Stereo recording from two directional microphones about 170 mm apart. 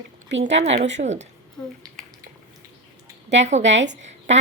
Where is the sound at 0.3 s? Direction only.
90° right.